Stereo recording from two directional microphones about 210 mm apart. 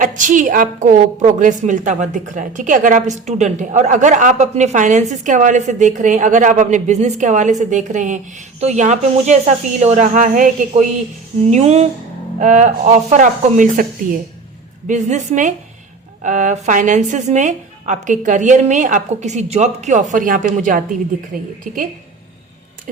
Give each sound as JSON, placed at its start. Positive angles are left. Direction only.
{"t": 0.0, "sound": "a woman's voice", "side_deg": -40}
{"t": 14.8, "sound": "a woman's voice", "side_deg": -35}